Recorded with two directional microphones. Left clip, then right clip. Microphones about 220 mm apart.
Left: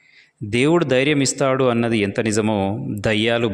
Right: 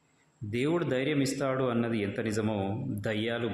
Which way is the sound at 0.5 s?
40° left (ahead or behind).